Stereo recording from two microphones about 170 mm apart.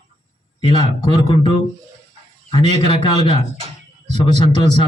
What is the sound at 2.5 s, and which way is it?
A man's voice, 30° left (ahead or behind).